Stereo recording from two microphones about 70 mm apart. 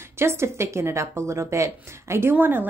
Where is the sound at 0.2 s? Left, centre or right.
Right.